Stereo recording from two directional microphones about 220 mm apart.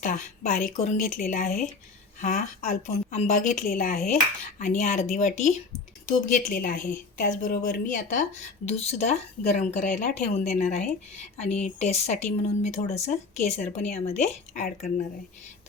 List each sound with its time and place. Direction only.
0.0 s speech: 35° left (ahead or behind)